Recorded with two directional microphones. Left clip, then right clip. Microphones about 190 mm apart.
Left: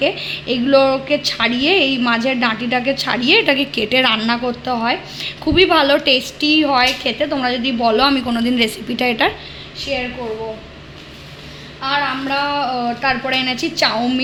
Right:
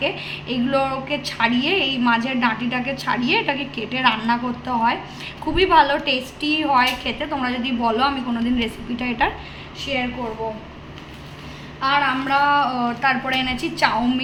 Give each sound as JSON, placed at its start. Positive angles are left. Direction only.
{"t": 0.0, "sound": "a woman's voice", "side_deg": 45}
{"t": 11.8, "sound": "a woman's voice", "side_deg": 30}